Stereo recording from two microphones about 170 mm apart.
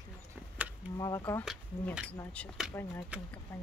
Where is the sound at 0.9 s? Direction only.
20° left (ahead or behind).